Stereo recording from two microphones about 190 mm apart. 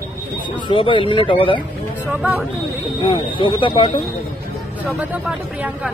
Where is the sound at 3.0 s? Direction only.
25° left (ahead or behind).